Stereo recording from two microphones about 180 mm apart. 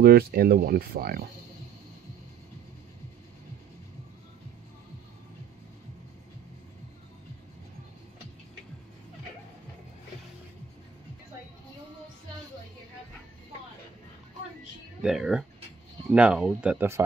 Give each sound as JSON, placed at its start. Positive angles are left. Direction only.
{"t": 0.0, "sound": "speech", "side_deg": -55}
{"t": 15.0, "sound": "speech", "side_deg": -5}